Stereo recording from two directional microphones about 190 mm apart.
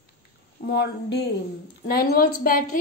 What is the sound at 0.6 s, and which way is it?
A woman's voice, 65° left (ahead or behind).